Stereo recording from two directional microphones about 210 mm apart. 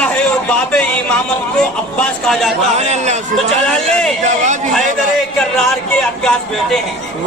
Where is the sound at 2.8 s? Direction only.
30° right (ahead or behind).